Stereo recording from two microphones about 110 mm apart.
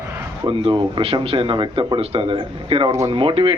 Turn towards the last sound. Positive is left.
turn(degrees=-50)  # may be behind; listen again after turning